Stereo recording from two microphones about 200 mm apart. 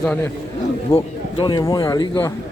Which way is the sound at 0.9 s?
25° left (ahead or behind).